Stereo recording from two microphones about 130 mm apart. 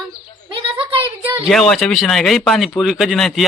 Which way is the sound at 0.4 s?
40° right (ahead or behind).